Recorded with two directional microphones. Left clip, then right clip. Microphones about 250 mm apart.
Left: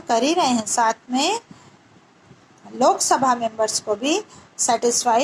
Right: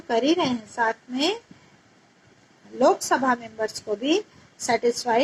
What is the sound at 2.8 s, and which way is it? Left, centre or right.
Speech, centre.